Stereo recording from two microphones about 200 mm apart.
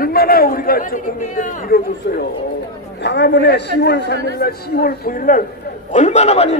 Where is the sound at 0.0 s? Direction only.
50° left (ahead or behind).